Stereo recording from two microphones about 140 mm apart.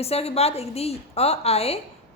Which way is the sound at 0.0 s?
45° left (ahead or behind).